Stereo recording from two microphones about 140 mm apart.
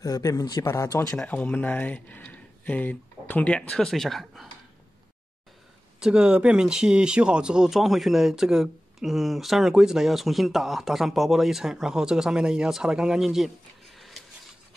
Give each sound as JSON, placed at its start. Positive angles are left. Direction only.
{"t": 0.0, "sound": "speech", "side_deg": 25}
{"t": 1.1, "sound": "speech", "side_deg": 10}
{"t": 5.9, "sound": "speech", "side_deg": -5}